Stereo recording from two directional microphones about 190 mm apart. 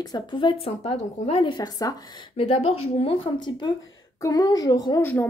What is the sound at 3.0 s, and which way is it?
A woman's voice, 25° left (ahead or behind).